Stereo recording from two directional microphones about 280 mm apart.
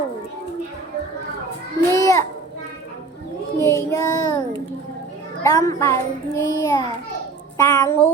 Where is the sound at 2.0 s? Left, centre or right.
Centre.